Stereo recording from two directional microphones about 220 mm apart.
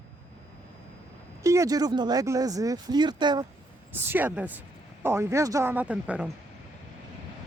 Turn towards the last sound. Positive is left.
turn(degrees=-5)  # may be behind; listen again after turning